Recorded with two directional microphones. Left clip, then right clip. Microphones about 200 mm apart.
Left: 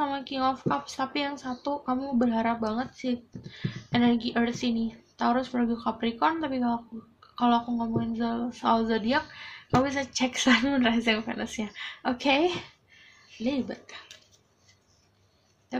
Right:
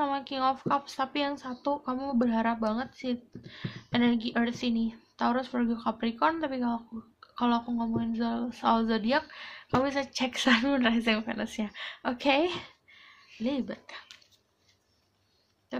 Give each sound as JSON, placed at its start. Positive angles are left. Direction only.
{"t": 0.0, "sound": "speech", "side_deg": -40}